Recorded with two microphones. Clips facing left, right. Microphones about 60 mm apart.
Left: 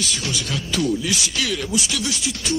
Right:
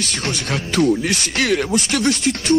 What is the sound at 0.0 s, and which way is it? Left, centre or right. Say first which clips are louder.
Speech: right 2 dB; right.